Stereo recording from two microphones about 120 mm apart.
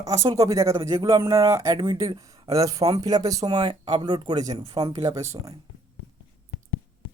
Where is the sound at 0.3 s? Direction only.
25° right (ahead or behind).